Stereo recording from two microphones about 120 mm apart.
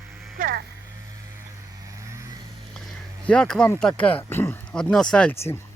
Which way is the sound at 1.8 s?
25° right (ahead or behind).